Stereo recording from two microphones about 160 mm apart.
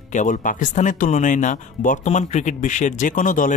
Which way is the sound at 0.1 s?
55° left (ahead or behind).